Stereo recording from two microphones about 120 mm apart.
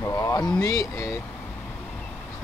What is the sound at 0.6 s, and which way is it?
Speech, 25° left (ahead or behind).